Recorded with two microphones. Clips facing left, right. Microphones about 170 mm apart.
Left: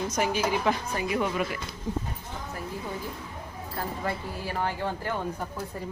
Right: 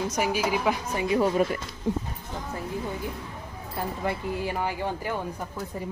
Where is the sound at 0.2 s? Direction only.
10° right (ahead or behind).